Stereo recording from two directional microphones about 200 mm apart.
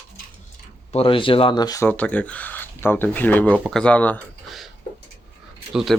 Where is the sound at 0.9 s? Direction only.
25° left (ahead or behind).